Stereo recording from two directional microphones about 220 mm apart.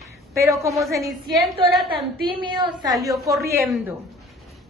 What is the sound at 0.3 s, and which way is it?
Speech, 15° right (ahead or behind).